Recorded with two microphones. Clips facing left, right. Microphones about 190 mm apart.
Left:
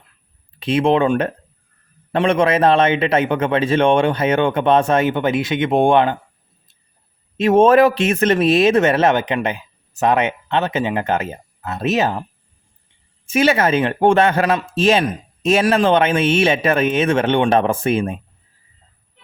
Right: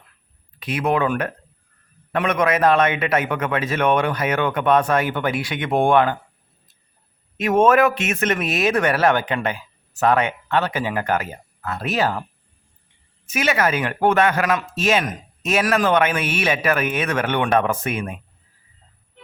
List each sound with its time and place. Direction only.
0.6 s speech: 25° left (ahead or behind)
7.3 s speech: 30° left (ahead or behind)
13.2 s speech: 30° left (ahead or behind)